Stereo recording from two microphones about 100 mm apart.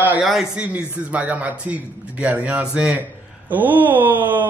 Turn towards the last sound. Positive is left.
turn(degrees=-20)  # may be behind; listen again after turning